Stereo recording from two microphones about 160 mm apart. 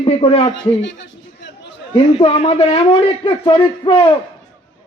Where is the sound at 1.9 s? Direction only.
35° left (ahead or behind).